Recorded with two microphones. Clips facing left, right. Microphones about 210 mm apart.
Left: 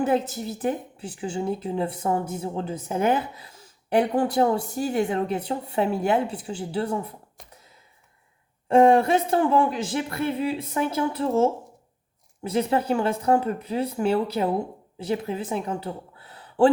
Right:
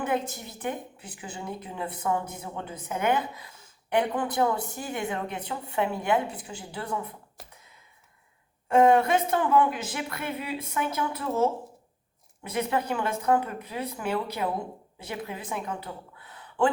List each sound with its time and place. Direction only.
0.0 s a woman's voice: 30° left (ahead or behind)
8.6 s a woman's voice: 30° left (ahead or behind)